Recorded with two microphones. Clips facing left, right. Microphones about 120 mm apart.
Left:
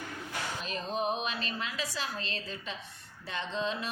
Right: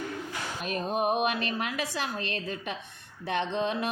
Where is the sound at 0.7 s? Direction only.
55° right (ahead or behind).